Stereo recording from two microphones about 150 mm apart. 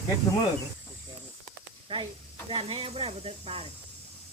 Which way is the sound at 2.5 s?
35° right (ahead or behind).